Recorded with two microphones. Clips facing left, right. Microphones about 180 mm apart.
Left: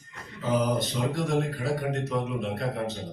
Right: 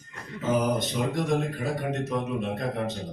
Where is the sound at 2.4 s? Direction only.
15° right (ahead or behind).